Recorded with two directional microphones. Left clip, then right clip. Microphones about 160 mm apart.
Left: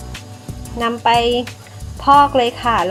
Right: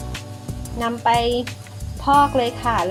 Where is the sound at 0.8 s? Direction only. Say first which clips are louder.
Left 4 dB; 20° left (ahead or behind).